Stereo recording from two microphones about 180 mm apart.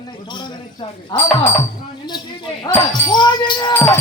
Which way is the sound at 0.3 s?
25° left (ahead or behind).